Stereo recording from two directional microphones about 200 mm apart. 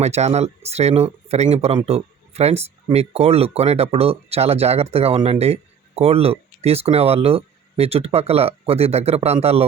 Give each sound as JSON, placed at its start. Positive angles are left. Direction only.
{"t": 0.0, "sound": "speech", "side_deg": -35}